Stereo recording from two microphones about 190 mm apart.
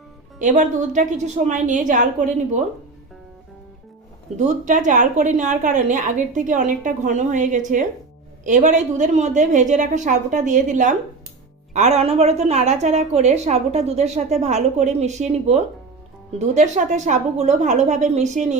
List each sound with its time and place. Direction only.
0.3 s a woman's voice: 40° right (ahead or behind)
4.4 s a woman's voice: 40° right (ahead or behind)